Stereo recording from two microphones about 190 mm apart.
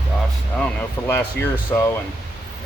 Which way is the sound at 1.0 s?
15° left (ahead or behind).